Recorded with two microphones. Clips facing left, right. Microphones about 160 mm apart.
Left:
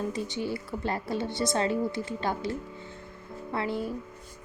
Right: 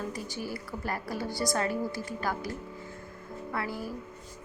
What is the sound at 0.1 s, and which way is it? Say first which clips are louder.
Speech: left 5 dB; 20° left (ahead or behind).